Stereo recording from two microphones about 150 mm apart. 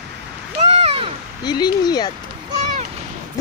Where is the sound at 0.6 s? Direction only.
40° right (ahead or behind).